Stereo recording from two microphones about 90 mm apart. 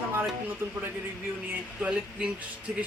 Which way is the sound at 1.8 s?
10° right (ahead or behind).